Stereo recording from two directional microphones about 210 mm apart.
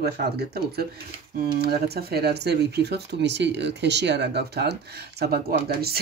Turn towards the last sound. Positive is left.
turn(degrees=-45)  # may be behind; listen again after turning